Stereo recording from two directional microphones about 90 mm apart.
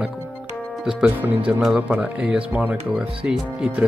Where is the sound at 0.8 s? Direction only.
15° right (ahead or behind).